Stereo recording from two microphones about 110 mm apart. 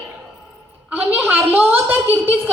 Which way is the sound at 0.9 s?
15° right (ahead or behind).